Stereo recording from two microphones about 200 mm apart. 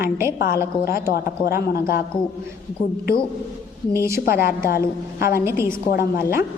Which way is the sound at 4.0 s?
15° right (ahead or behind).